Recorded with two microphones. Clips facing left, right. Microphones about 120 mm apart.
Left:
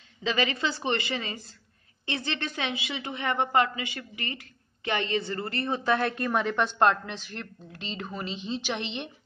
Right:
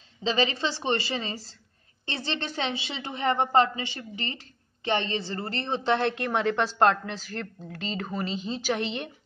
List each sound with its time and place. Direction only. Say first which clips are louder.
0.2 s a woman's voice: right 2 dB; 30° right (ahead or behind)